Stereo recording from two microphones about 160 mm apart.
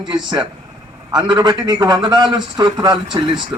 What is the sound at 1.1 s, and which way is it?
A man's voice, 30° right (ahead or behind).